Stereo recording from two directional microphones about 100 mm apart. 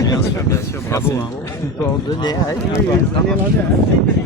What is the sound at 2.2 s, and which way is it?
Speech, 40° left (ahead or behind).